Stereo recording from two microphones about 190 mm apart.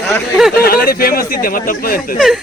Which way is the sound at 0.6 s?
50° left (ahead or behind).